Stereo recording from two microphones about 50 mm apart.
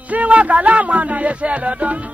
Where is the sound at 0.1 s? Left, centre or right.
Right.